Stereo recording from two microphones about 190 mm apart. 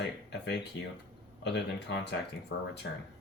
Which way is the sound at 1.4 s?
65° left (ahead or behind).